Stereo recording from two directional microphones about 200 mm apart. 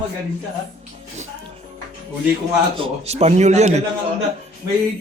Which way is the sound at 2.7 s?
30° right (ahead or behind).